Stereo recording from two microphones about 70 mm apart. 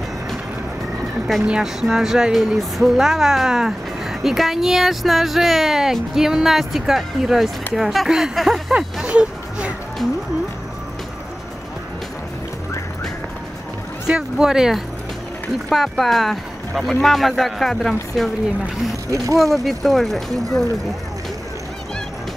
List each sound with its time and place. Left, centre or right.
1.4 s speech: centre
9.0 s a sound: centre
14.0 s speech: centre
15.7 s speech: centre
19.0 s speech: right
19.4 s speech: centre